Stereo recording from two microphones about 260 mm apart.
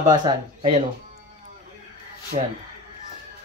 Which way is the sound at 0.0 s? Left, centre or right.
Centre.